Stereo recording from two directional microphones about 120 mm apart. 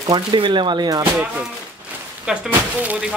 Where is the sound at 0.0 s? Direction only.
40° right (ahead or behind).